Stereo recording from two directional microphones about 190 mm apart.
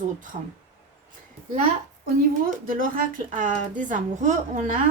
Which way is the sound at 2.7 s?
45° right (ahead or behind).